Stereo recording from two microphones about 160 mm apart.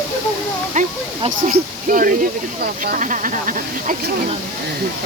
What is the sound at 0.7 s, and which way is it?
Speech, 50° right (ahead or behind).